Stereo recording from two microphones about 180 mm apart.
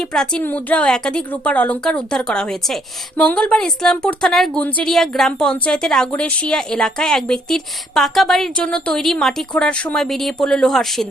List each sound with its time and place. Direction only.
0.1 s speech: 5° left (ahead or behind)